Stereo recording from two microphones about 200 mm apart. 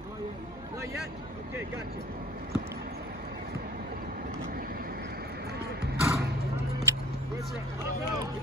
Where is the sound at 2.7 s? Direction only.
50° right (ahead or behind).